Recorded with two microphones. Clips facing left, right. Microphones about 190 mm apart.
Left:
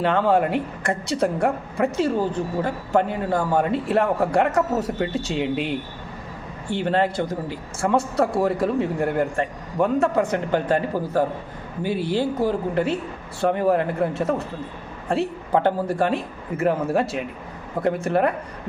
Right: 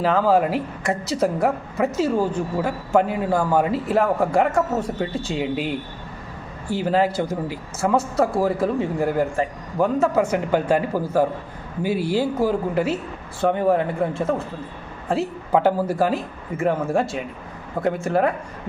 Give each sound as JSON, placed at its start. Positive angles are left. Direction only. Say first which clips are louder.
{"t": 0.0, "sound": "a woman's voice", "louder": "right 1 dB", "side_deg": 0}